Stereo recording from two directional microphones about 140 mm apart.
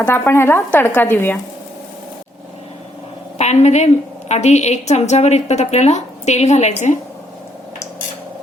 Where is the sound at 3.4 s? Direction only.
55° left (ahead or behind).